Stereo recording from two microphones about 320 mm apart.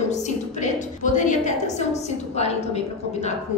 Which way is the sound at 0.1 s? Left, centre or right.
Left.